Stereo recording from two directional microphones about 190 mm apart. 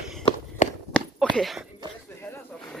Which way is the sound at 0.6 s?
40° left (ahead or behind).